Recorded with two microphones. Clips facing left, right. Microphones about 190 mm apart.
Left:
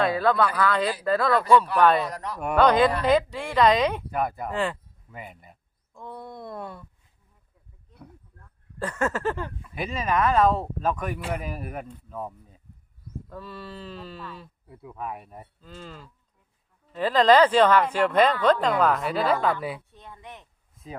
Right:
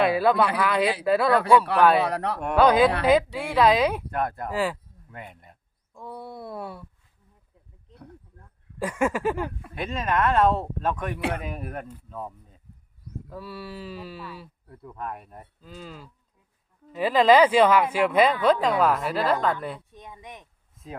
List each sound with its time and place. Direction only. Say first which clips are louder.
0.0 s speech: right 2 dB; 10° right (ahead or behind)
2.0 s a man's voice: right 5 dB; 65° right (ahead or behind)
2.4 s speech: right 1 dB; centre (ahead or behind)
5.1 s speech: even; 5° left (ahead or behind)
8.8 s speech: right 2 dB; 10° right (ahead or behind)
9.7 s speech: left 1 dB; centre (ahead or behind)
13.2 s speech: right 3 dB; 10° right (ahead or behind)
14.7 s speech: even; 5° left (ahead or behind)
19.9 s speech: right 1 dB; 15° right (ahead or behind)